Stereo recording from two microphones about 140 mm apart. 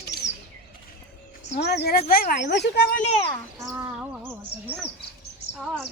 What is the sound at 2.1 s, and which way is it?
Speech, 90° left.